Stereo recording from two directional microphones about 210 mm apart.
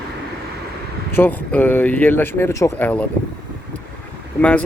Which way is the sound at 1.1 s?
10° left (ahead or behind).